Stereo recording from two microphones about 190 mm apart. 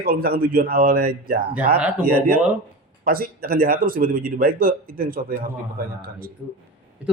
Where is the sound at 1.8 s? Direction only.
5° right (ahead or behind).